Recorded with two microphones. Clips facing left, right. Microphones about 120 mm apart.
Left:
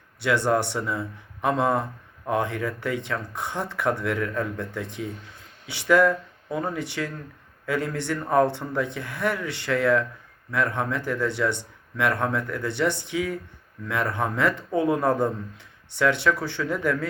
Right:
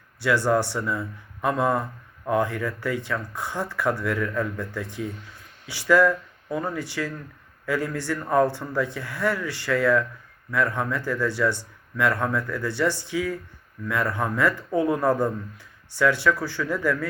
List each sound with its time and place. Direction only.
0.2 s speech: 20° left (ahead or behind)